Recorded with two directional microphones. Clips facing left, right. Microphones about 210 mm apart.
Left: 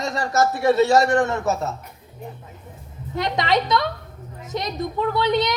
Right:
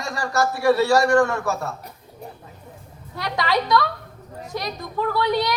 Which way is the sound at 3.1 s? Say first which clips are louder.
Left 2 dB; 20° left (ahead or behind).